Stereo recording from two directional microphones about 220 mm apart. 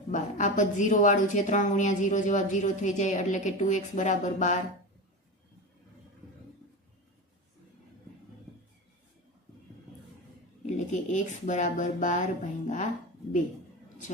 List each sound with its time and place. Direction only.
0.1 s a woman's voice: 35° left (ahead or behind)
10.7 s a woman's voice: 35° left (ahead or behind)